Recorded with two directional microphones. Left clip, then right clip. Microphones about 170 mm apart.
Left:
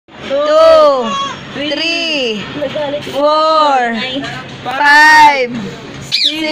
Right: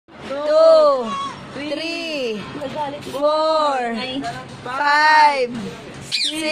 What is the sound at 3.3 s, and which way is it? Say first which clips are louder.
A man's voice: left 7 dB; 10° right (ahead or behind).